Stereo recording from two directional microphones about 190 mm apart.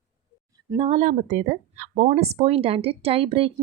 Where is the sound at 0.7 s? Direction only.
30° right (ahead or behind).